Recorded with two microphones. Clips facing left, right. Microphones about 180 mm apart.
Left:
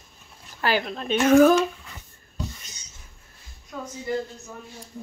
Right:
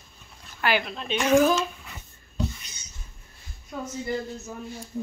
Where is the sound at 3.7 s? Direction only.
5° right (ahead or behind).